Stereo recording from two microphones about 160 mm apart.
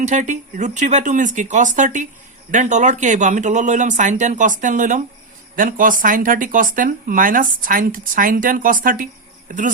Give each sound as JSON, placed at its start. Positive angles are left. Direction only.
{"t": 0.0, "sound": "speech", "side_deg": -45}